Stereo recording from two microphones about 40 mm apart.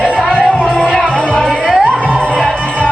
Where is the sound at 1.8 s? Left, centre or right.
Right.